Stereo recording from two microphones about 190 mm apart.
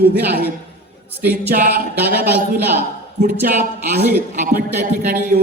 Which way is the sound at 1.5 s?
55° right (ahead or behind).